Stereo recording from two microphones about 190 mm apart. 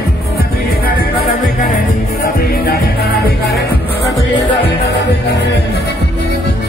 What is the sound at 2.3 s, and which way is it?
Music, 55° left (ahead or behind).